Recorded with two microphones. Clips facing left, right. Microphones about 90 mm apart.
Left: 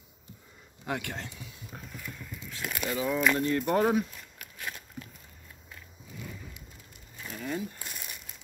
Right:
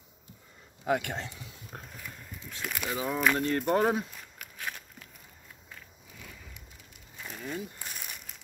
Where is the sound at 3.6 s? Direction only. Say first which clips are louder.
Even; 30° right (ahead or behind).